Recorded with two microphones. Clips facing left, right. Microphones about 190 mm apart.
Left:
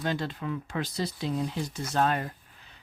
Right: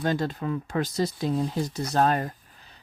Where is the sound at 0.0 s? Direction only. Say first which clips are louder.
Right 5 dB; 45° right (ahead or behind).